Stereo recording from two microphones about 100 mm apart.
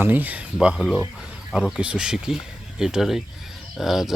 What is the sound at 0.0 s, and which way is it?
Speech, 20° right (ahead or behind).